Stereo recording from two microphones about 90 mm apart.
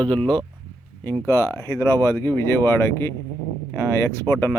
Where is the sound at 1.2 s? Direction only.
30° left (ahead or behind).